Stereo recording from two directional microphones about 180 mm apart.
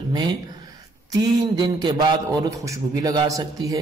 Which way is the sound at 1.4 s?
25° right (ahead or behind).